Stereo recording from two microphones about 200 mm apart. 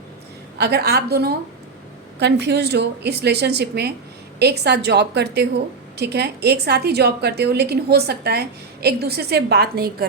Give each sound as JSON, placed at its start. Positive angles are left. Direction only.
{"t": 0.6, "sound": "a woman's voice", "side_deg": -55}